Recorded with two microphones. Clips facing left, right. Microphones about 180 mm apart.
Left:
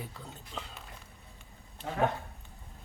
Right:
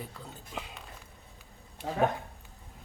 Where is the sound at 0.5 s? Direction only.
10° right (ahead or behind).